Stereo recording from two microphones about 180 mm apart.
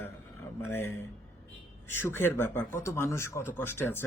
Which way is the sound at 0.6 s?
15° left (ahead or behind).